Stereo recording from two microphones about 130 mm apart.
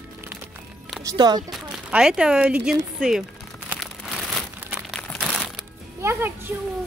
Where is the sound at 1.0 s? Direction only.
30° right (ahead or behind).